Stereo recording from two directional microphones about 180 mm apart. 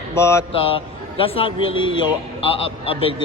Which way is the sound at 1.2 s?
30° left (ahead or behind).